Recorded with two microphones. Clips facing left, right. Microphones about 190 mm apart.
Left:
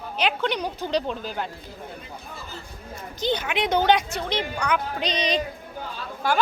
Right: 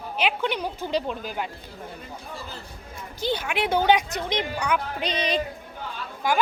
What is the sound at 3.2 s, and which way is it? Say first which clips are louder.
Speech: left 1 dB; 5° right (ahead or behind).